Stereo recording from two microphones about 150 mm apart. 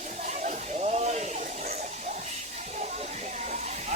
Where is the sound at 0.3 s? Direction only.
50° right (ahead or behind).